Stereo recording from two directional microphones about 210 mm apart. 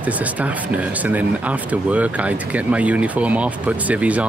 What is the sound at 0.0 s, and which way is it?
Speech, 5° right (ahead or behind).